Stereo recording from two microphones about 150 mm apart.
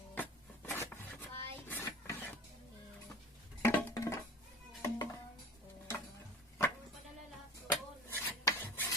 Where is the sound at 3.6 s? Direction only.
15° left (ahead or behind).